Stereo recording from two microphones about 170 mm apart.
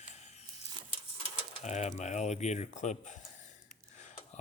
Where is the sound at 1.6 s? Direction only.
40° left (ahead or behind).